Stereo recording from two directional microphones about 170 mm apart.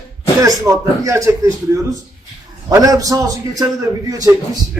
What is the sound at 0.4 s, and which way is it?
A man's voice, 20° right (ahead or behind).